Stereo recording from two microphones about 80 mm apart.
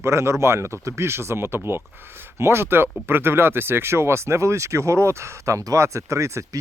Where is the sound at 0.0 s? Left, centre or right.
Right.